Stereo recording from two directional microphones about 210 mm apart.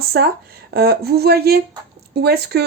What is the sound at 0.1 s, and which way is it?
Speech, 45° right (ahead or behind).